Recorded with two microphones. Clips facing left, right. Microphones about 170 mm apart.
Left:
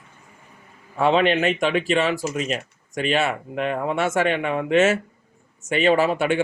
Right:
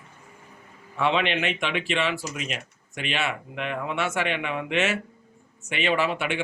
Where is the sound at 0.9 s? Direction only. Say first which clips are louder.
Left 6 dB; 40° left (ahead or behind).